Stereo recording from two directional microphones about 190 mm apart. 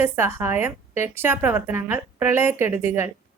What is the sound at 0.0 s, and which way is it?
Speech, 10° right (ahead or behind).